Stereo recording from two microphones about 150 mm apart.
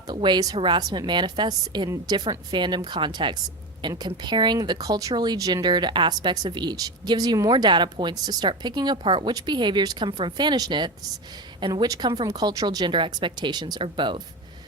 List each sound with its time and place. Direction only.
0.1 s a woman's voice: 30° right (ahead or behind)